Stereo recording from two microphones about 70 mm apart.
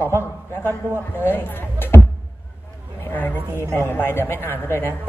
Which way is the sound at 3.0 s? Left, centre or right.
Left.